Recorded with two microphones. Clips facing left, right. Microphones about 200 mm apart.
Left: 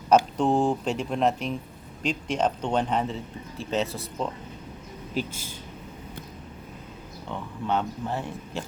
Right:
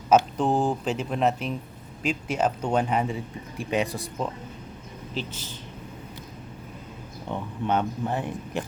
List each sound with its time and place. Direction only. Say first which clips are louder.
0.1 s speech: even; 5° right (ahead or behind)
5.1 s speech: left 3 dB; 10° left (ahead or behind)
7.3 s speech: right 2 dB; 15° right (ahead or behind)